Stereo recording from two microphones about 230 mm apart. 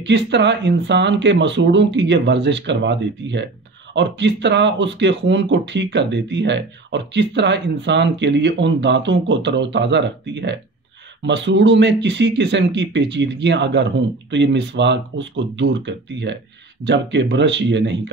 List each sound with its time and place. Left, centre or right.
0.0 s speech: right